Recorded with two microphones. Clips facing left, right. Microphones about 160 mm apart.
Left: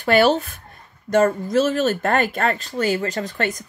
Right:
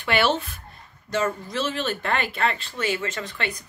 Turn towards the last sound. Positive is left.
turn(degrees=45)  # may be behind; listen again after turning